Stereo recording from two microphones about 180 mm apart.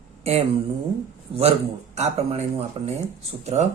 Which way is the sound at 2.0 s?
35° right (ahead or behind).